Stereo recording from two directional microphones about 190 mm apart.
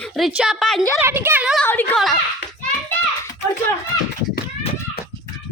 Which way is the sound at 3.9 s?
20° left (ahead or behind).